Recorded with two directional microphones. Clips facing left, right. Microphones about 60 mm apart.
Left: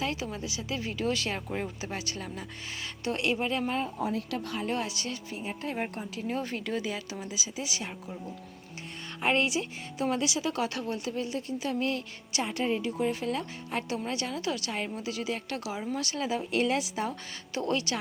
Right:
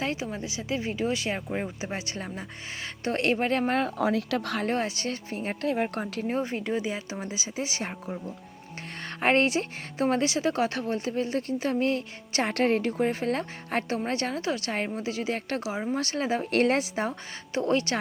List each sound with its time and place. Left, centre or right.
0.0 s speech: right
3.7 s speech: right
4.7 s speech: right
6.4 s speech: right
12.4 s a woman's voice: right
13.0 s speech: right
16.5 s speech: right